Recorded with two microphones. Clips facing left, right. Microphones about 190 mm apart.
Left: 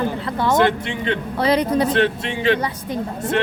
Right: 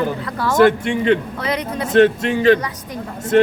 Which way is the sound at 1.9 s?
45° right (ahead or behind).